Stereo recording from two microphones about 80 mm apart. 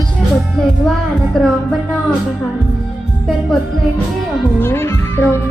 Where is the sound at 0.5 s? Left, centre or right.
Centre.